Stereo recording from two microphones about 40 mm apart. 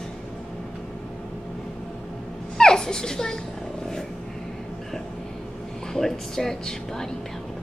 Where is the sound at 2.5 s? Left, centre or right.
Centre.